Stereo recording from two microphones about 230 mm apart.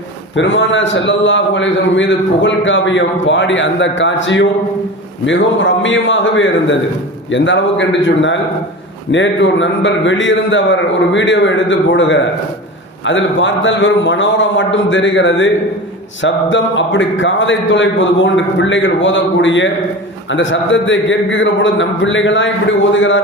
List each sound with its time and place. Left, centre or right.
0.3 s a man's voice: left